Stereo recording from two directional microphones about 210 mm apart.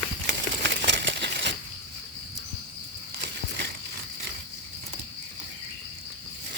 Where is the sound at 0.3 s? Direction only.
50° right (ahead or behind).